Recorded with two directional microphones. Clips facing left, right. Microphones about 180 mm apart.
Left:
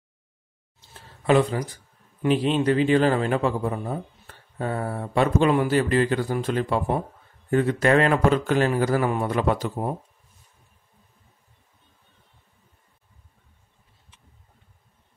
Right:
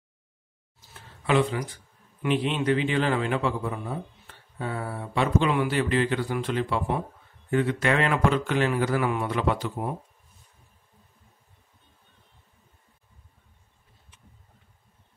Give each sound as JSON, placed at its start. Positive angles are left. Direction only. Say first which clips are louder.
{"t": 1.2, "sound": "a man's voice", "louder": "left 4 dB", "side_deg": 40}